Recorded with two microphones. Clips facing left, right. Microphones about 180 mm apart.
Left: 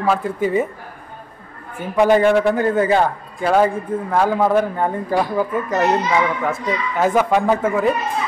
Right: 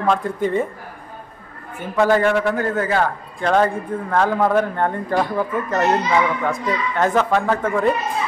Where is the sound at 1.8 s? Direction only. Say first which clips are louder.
Left 2 dB; 15° left (ahead or behind).